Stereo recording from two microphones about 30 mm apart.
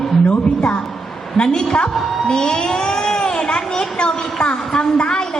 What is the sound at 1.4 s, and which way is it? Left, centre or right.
Speech, left.